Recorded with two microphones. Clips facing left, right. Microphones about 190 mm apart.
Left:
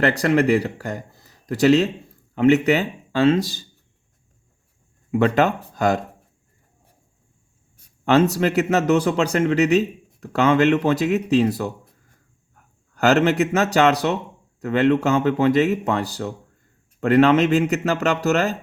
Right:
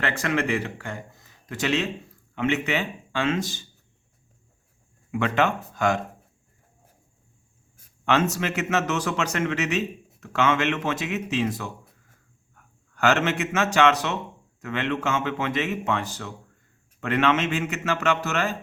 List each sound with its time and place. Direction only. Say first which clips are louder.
0.0 s speech: left 8 dB; 35° left (ahead or behind)
5.1 s speech: left 5 dB; 35° left (ahead or behind)
8.0 s a man's voice: left 7 dB; 35° left (ahead or behind)